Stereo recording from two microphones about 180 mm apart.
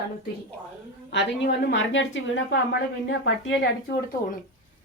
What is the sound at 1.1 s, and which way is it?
A woman's voice, 75° left (ahead or behind).